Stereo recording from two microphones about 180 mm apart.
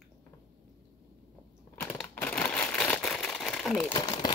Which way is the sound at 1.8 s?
5° left (ahead or behind).